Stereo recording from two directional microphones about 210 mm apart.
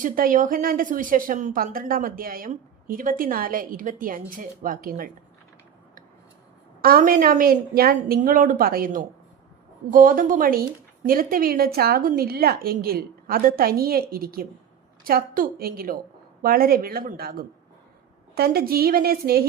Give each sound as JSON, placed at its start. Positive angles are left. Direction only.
{"t": 0.0, "sound": "a woman's voice", "side_deg": -40}
{"t": 6.8, "sound": "a woman's voice", "side_deg": -45}